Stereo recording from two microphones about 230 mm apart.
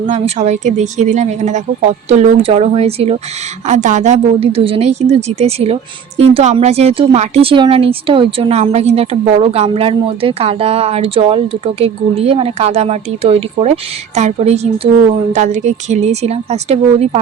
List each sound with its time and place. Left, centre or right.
0.1 s speech: right